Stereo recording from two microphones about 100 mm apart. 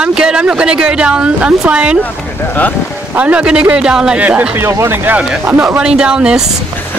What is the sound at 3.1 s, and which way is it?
Speech, 10° right (ahead or behind).